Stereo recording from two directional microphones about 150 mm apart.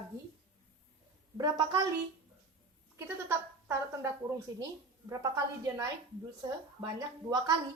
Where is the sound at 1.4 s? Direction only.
25° right (ahead or behind).